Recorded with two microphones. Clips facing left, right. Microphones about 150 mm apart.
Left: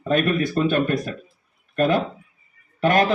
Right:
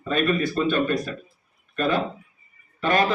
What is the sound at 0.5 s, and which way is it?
A man's voice, 50° left (ahead or behind).